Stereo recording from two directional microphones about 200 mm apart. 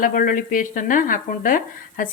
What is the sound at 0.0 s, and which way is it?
Speech, 45° left (ahead or behind).